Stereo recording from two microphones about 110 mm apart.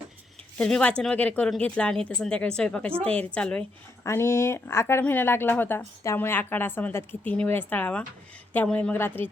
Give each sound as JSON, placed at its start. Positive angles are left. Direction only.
{"t": 0.6, "sound": "speech", "side_deg": 10}
{"t": 4.0, "sound": "speech", "side_deg": 25}